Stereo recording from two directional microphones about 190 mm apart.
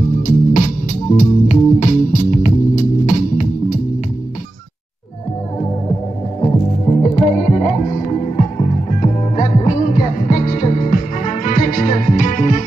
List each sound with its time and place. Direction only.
0.3 s music: 45° left (ahead or behind)
7.0 s music: 40° left (ahead or behind)